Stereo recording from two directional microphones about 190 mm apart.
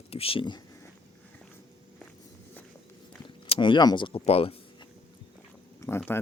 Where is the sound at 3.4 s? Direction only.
25° left (ahead or behind).